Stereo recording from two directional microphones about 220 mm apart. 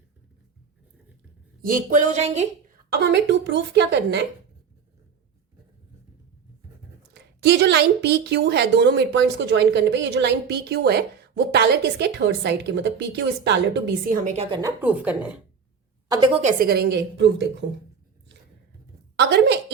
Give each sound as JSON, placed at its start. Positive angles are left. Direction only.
{"t": 1.6, "sound": "speech", "side_deg": -35}
{"t": 2.9, "sound": "a woman's voice", "side_deg": -50}
{"t": 7.1, "sound": "a woman's voice", "side_deg": -50}
{"t": 14.5, "sound": "a woman's voice", "side_deg": -10}
{"t": 16.0, "sound": "a woman's voice", "side_deg": -20}
{"t": 16.4, "sound": "a woman's voice", "side_deg": -35}
{"t": 19.1, "sound": "a woman's voice", "side_deg": -50}